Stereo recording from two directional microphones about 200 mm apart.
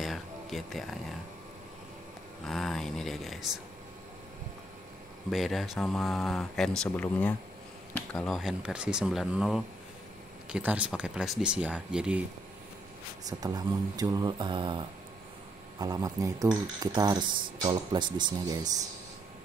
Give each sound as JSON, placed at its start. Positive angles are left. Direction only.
{"t": 0.0, "sound": "a sound", "side_deg": 0}
{"t": 2.4, "sound": "speech", "side_deg": 0}
{"t": 5.3, "sound": "speech", "side_deg": 0}
{"t": 13.3, "sound": "speech", "side_deg": -20}